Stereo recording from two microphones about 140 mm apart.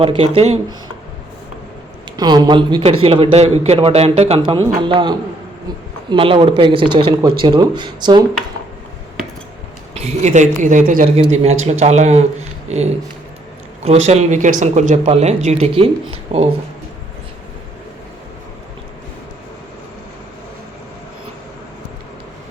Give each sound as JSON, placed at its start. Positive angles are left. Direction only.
{"t": 0.0, "sound": "speech", "side_deg": -45}
{"t": 2.1, "sound": "speech", "side_deg": -30}
{"t": 2.8, "sound": "speech", "side_deg": -45}
{"t": 4.8, "sound": "speech", "side_deg": -35}
{"t": 9.9, "sound": "speech", "side_deg": -50}
{"t": 11.0, "sound": "speech", "side_deg": -45}